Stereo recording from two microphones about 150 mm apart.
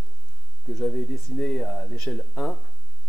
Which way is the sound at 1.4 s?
5° left (ahead or behind).